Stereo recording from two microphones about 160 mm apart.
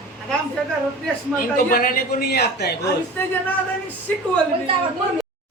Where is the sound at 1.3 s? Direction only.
65° left (ahead or behind); by 2.8 s 90° left.